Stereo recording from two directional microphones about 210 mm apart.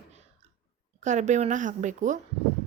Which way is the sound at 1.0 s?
35° right (ahead or behind).